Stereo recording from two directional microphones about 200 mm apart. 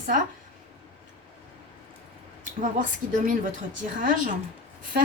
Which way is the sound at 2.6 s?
40° right (ahead or behind).